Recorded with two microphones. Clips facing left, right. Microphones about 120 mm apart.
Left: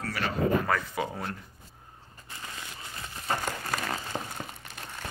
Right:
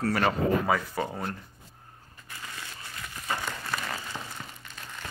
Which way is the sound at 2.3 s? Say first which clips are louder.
Even; 25° left (ahead or behind).